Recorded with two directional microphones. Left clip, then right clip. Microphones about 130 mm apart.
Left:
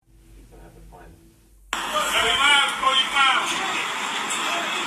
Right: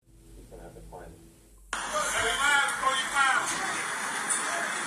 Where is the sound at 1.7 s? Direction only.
30° left (ahead or behind).